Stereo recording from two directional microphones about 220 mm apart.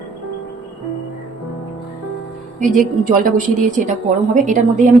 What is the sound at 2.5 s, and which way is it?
A woman's voice, 35° right (ahead or behind).